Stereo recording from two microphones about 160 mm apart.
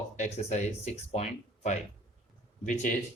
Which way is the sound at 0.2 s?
45° left (ahead or behind).